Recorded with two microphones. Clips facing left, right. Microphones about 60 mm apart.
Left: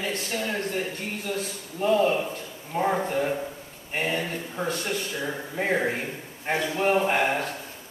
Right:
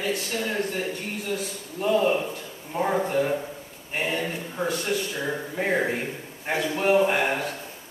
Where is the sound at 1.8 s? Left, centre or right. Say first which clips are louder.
Even; centre.